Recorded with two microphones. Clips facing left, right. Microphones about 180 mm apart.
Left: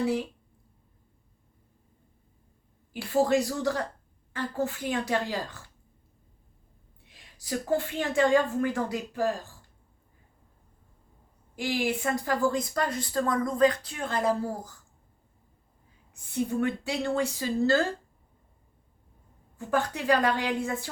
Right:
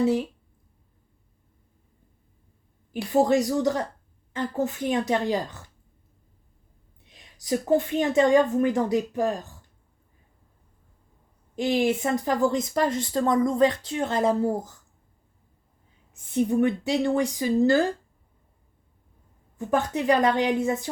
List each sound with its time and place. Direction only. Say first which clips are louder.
0.0 s speech: right 5 dB; 20° right (ahead or behind)
2.9 s speech: right 3 dB; 20° right (ahead or behind)
7.0 s speech: right 2 dB; 20° right (ahead or behind)
11.5 s speech: right 6 dB; 20° right (ahead or behind)
16.1 s speech: right 6 dB; 20° right (ahead or behind)
19.5 s speech: right 4 dB; 20° right (ahead or behind)